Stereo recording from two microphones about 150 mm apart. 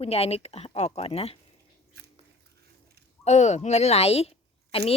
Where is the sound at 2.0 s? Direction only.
90° right.